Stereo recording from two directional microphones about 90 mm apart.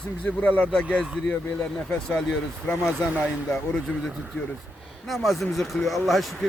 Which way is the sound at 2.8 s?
5° right (ahead or behind).